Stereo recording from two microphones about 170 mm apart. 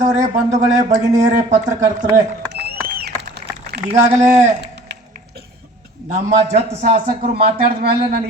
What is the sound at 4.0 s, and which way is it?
Speech, 45° right (ahead or behind).